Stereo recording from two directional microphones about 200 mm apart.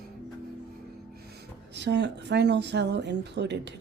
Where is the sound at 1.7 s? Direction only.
60° right (ahead or behind).